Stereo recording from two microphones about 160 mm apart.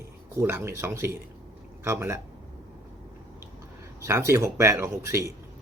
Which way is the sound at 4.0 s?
15° right (ahead or behind).